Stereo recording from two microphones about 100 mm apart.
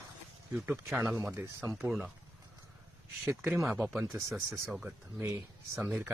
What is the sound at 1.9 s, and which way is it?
Speech, 5° right (ahead or behind).